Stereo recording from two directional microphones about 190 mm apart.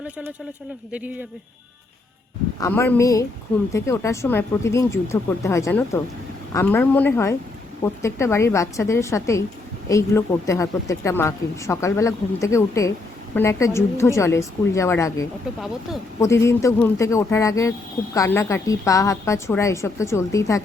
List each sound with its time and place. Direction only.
0.0 s speech: 5° right (ahead or behind)
2.6 s speech: 15° left (ahead or behind)